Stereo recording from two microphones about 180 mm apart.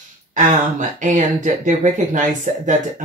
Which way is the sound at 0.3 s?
40° right (ahead or behind).